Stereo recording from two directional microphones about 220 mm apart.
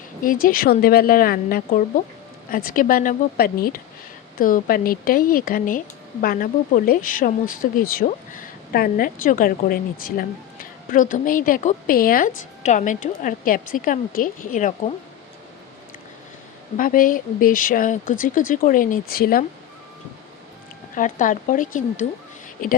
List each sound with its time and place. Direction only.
0.3 s speech: 40° left (ahead or behind)
16.7 s speech: 40° left (ahead or behind)
20.9 s speech: 35° left (ahead or behind)